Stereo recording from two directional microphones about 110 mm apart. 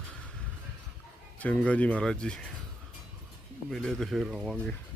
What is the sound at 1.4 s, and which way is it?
Speech, 10° left (ahead or behind).